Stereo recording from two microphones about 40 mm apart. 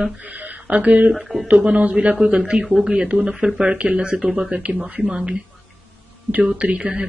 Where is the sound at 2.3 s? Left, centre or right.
Centre.